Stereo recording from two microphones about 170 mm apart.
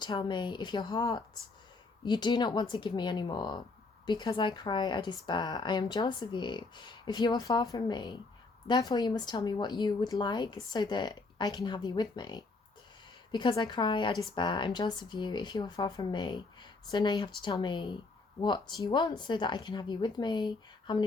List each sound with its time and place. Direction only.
0.0 s a woman's voice: 25° left (ahead or behind)